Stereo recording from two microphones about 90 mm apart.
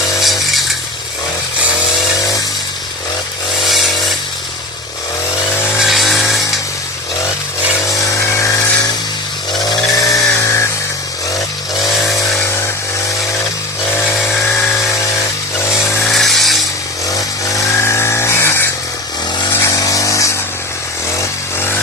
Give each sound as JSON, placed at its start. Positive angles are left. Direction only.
{"t": 0.2, "sound": "chainsaw", "side_deg": 0}
{"t": 2.1, "sound": "chainsaw", "side_deg": 40}
{"t": 5.5, "sound": "vehicle", "side_deg": 30}
{"t": 5.8, "sound": "a sound", "side_deg": 0}
{"t": 7.9, "sound": "a sound", "side_deg": 35}
{"t": 9.6, "sound": "chainsaw", "side_deg": 45}
{"t": 11.8, "sound": "vehicle", "side_deg": 40}
{"t": 14.3, "sound": "dental drill", "side_deg": 25}
{"t": 15.6, "sound": "a sound", "side_deg": 30}
{"t": 16.1, "sound": "tools", "side_deg": 0}
{"t": 17.1, "sound": "chainsaw", "side_deg": 40}
{"t": 19.5, "sound": "vehicle", "side_deg": 40}